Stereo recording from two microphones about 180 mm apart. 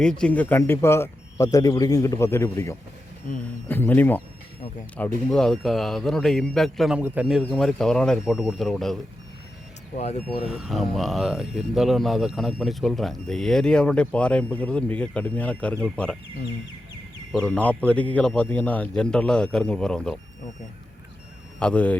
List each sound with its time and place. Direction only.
0.0 s a man's voice: 5° left (ahead or behind)
3.3 s speech: 45° left (ahead or behind)
3.7 s a man's voice: 10° left (ahead or behind)
10.4 s speech: centre (ahead or behind)
17.4 s a man's voice: 10° left (ahead or behind)
21.6 s a man's voice: 5° left (ahead or behind)